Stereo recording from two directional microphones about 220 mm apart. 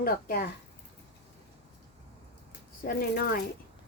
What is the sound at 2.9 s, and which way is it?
Speech, 40° left (ahead or behind).